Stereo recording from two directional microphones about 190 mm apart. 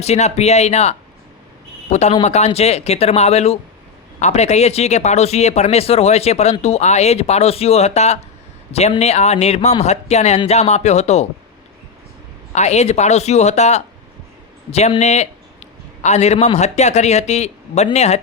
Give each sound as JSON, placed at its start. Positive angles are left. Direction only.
{"t": 0.0, "sound": "speech", "side_deg": 35}
{"t": 12.5, "sound": "a man's voice", "side_deg": 35}